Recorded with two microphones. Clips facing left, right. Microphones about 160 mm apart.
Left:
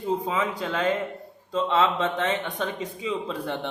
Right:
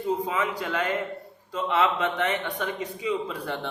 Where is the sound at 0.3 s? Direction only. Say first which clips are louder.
Left 1 dB; 25° left (ahead or behind).